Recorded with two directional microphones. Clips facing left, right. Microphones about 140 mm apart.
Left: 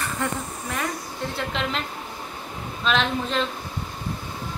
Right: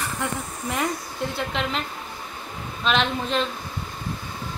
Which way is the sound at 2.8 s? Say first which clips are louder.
Even; centre (ahead or behind).